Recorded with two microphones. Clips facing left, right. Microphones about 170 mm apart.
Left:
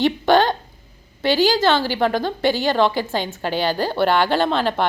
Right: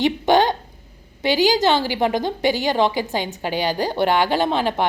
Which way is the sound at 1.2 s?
15° right (ahead or behind).